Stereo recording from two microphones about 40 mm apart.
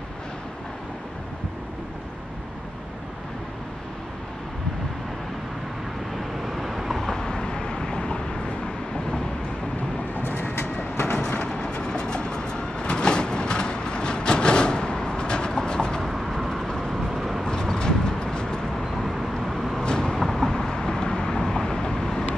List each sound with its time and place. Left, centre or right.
6.5 s vehicle: centre
7.0 s vehicle: centre
10.1 s vehicle: left
11.1 s vehicle: left
11.4 s train: left
16.0 s vehicle: centre
16.9 s vehicle: centre
17.4 s vehicle: centre
19.5 s vehicle: centre
19.8 s vehicle: left
20.2 s vehicle: centre